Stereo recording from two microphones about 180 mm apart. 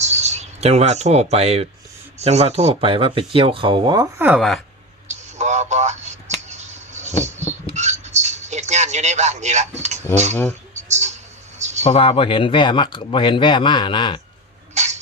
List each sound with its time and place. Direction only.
0.0 s speech: 40° right (ahead or behind)
4.4 s speech: centre (ahead or behind)
5.0 s a sound: 40° right (ahead or behind)
11.8 s speech: 35° left (ahead or behind)